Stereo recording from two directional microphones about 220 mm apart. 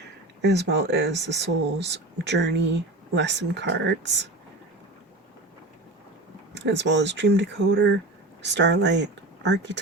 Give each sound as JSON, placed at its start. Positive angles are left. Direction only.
{"t": 0.4, "sound": "speech", "side_deg": -50}
{"t": 6.5, "sound": "speech", "side_deg": -50}